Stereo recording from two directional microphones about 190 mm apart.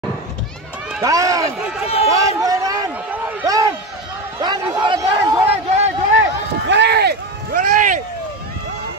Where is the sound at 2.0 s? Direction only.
15° right (ahead or behind).